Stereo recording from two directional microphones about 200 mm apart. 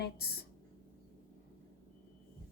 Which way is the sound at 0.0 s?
50° left (ahead or behind).